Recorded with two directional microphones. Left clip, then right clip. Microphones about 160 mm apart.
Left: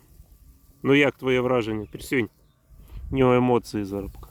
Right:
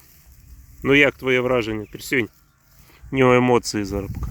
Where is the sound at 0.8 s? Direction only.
Centre (ahead or behind).